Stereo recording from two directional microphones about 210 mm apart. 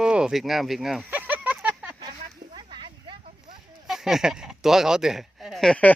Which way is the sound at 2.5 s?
20° right (ahead or behind).